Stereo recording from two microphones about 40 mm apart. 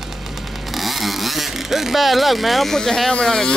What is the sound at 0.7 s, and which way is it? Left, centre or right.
Vehicle, centre.